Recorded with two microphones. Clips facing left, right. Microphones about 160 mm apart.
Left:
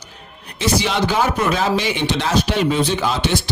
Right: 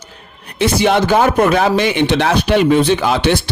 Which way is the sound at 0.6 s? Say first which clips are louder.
Right 6 dB; 55° right (ahead or behind).